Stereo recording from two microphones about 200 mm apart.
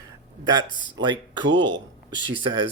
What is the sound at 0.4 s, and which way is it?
Speech, 20° right (ahead or behind).